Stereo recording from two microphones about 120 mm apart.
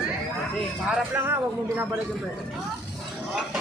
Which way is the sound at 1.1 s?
20° right (ahead or behind).